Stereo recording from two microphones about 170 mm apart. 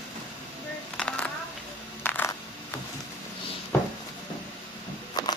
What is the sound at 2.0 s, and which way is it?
Coin, 15° left (ahead or behind).